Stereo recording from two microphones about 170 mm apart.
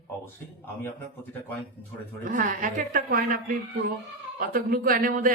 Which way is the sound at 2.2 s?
50° right (ahead or behind).